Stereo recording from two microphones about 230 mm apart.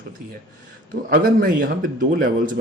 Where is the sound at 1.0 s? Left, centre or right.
Right.